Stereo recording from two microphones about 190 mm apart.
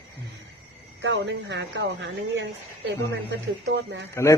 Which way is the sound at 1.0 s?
70° right (ahead or behind).